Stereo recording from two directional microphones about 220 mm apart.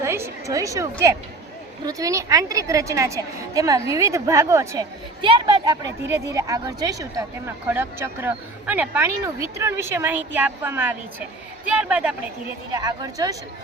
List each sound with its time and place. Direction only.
0.0 s a woman's voice: 10° right (ahead or behind)
12.7 s a woman's voice: 15° right (ahead or behind)